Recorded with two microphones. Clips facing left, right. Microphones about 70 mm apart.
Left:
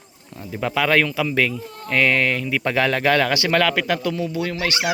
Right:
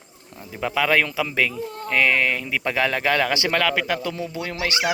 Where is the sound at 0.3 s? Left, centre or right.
Centre.